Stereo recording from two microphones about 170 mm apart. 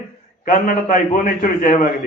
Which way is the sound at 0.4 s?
55° left (ahead or behind).